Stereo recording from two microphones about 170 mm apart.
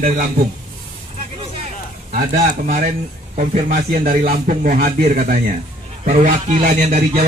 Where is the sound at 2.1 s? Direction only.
45° right (ahead or behind).